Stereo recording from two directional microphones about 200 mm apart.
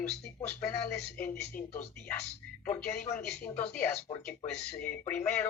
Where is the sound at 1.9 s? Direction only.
5° left (ahead or behind).